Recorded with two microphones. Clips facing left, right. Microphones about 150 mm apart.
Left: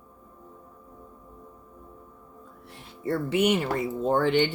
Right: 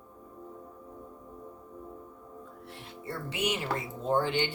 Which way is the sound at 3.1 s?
60° left (ahead or behind).